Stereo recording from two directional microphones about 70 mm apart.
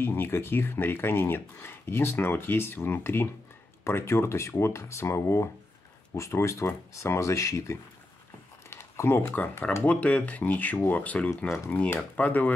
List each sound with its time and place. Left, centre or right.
0.0 s speech: left
8.6 s speech: left
9.8 s speech: centre